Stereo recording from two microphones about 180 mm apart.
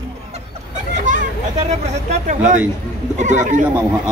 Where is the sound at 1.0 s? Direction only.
40° right (ahead or behind).